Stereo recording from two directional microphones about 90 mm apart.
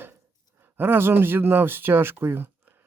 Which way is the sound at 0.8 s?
25° right (ahead or behind).